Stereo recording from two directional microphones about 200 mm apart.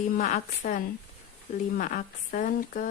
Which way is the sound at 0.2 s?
40° left (ahead or behind).